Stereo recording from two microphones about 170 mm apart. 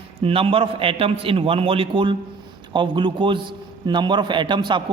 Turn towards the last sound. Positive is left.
turn(degrees=-30)  # may be behind; listen again after turning